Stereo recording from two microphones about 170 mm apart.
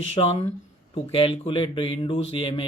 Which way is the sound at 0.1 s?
35° left (ahead or behind).